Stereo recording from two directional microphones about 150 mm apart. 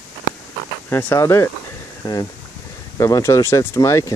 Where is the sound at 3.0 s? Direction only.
20° left (ahead or behind).